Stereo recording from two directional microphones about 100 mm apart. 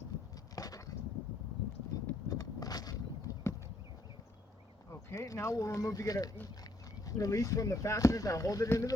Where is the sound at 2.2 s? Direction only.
40° left (ahead or behind).